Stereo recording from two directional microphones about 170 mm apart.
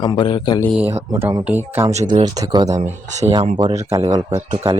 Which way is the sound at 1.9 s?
40° right (ahead or behind).